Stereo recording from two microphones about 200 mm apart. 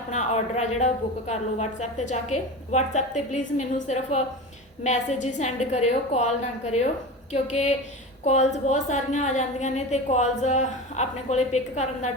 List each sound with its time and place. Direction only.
0.1 s a woman's voice: 35° left (ahead or behind)